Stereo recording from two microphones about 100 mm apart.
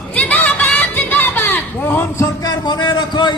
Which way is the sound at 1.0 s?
20° left (ahead or behind).